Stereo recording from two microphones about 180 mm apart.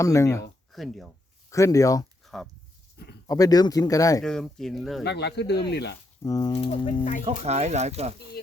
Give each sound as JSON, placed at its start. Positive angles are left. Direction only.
{"t": 0.0, "sound": "speech", "side_deg": 15}
{"t": 0.7, "sound": "speech", "side_deg": 0}
{"t": 1.5, "sound": "speech", "side_deg": 15}
{"t": 2.2, "sound": "a sound", "side_deg": 0}
{"t": 3.2, "sound": "speech", "side_deg": 20}
{"t": 4.2, "sound": "speech", "side_deg": 5}
{"t": 5.0, "sound": "speech", "side_deg": 70}
{"t": 6.2, "sound": "speech", "side_deg": 20}
{"t": 6.5, "sound": "speech", "side_deg": 35}
{"t": 7.3, "sound": "speech", "side_deg": -35}